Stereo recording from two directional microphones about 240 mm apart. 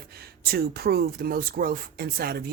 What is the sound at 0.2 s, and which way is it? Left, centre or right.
Speech, right.